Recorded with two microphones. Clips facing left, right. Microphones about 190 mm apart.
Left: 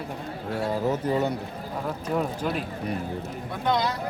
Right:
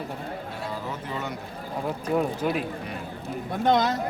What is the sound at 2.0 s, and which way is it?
Speech, 5° right (ahead or behind).